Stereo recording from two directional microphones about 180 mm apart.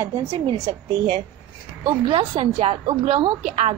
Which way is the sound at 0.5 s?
25° right (ahead or behind).